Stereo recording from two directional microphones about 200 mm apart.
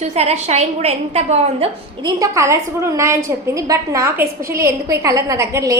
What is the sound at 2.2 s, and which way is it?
A woman's voice, 15° right (ahead or behind).